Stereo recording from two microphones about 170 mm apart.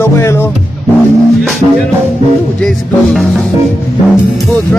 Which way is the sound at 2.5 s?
Centre (ahead or behind).